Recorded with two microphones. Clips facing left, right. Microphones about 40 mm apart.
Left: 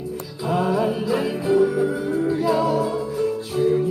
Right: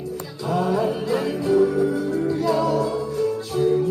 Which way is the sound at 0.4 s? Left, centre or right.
Centre.